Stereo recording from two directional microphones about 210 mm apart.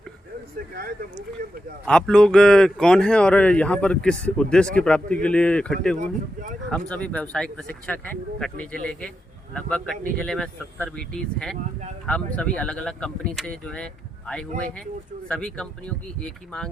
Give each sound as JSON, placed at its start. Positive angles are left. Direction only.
{"t": 1.8, "sound": "speech", "side_deg": 5}
{"t": 6.0, "sound": "speech", "side_deg": -35}
{"t": 6.7, "sound": "speech", "side_deg": 5}